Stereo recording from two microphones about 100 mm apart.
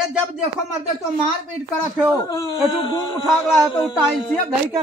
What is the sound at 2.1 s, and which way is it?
Speech, 30° left (ahead or behind).